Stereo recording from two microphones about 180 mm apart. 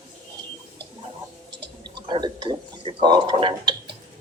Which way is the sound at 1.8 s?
25° right (ahead or behind).